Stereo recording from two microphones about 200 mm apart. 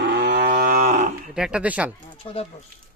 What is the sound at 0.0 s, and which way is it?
Livestock, 55° right (ahead or behind).